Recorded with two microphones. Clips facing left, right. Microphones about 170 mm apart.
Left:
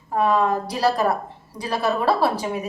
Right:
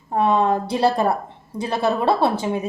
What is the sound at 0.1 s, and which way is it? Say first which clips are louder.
A woman's voice: right 2 dB; 25° right (ahead or behind).